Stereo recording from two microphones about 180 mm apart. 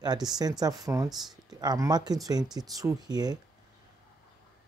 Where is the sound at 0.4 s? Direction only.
20° right (ahead or behind).